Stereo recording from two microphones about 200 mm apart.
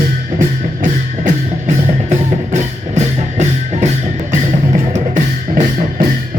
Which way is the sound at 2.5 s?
35° right (ahead or behind).